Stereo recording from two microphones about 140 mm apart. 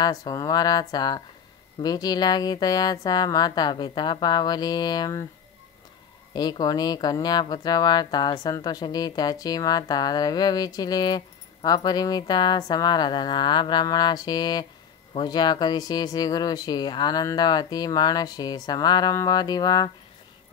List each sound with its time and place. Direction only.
0.0 s speech: 25° left (ahead or behind)
6.3 s speech: 30° left (ahead or behind)